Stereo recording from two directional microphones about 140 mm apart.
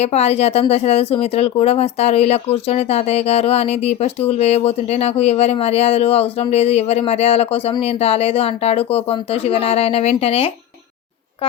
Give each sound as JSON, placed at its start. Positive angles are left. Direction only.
{"t": 0.0, "sound": "speech", "side_deg": 50}